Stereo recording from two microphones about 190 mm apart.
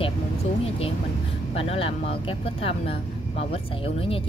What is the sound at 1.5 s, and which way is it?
Speech, 30° left (ahead or behind).